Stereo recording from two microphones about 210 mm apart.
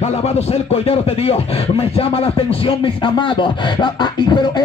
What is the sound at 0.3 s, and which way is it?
Speech, 30° left (ahead or behind).